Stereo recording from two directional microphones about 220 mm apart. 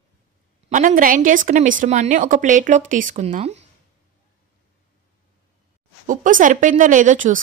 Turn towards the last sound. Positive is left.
turn(degrees=-35)  # may be behind; listen again after turning